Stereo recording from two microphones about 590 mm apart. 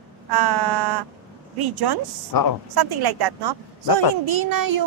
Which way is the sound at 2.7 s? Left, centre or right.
Right.